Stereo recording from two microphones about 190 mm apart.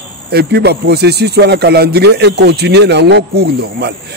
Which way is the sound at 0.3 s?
55° right (ahead or behind).